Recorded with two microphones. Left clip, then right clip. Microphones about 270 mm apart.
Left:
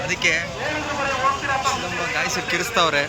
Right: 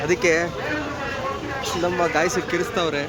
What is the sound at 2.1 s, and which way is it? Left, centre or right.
Speech, centre.